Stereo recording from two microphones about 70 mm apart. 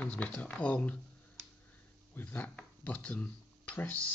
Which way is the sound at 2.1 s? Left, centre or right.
Left.